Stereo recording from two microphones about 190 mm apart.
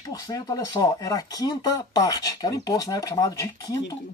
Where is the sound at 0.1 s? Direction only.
20° left (ahead or behind).